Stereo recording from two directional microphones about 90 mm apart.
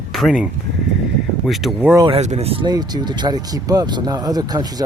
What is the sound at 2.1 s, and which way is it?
Speech, 85° right.